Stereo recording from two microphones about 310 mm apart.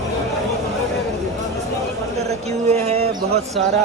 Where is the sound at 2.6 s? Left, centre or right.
Right.